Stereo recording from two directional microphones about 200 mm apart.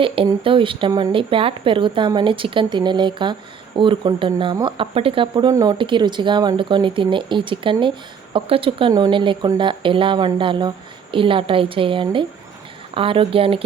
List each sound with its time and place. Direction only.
0.0 s speech: 25° right (ahead or behind)